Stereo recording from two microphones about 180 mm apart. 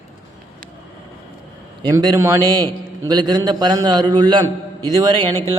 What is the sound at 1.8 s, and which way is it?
A man's voice, 20° right (ahead or behind).